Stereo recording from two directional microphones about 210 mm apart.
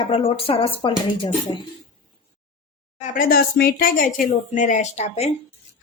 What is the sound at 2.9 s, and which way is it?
Speech, 40° left (ahead or behind).